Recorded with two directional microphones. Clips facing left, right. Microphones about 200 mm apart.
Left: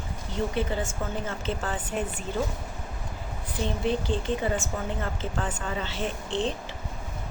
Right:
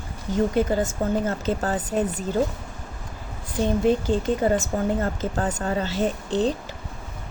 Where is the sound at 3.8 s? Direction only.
45° right (ahead or behind).